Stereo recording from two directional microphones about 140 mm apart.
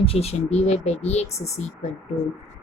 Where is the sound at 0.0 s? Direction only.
45° left (ahead or behind).